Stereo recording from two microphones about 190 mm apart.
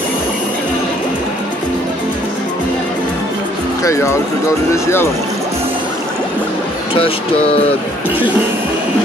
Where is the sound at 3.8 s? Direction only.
15° left (ahead or behind).